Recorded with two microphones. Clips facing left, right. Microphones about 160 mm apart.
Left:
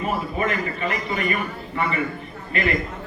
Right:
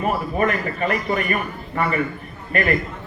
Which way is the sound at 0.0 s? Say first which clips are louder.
Right 4 dB; 50° right (ahead or behind).